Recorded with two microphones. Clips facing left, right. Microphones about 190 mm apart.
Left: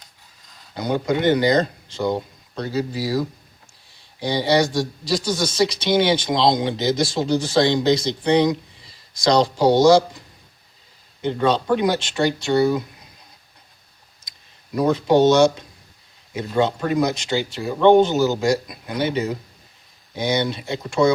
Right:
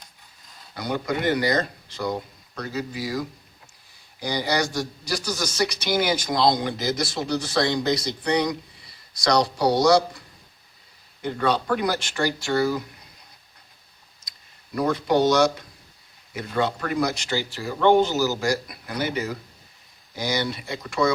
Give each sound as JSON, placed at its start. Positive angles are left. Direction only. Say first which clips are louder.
{"t": 0.7, "sound": "speech", "louder": "left 5 dB", "side_deg": 25}
{"t": 14.3, "sound": "speech", "louder": "left 4 dB", "side_deg": 20}